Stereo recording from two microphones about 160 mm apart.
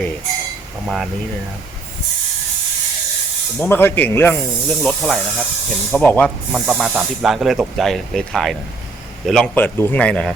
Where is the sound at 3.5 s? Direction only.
10° left (ahead or behind).